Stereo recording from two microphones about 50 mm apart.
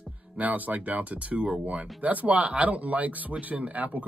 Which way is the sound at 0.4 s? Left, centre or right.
Right.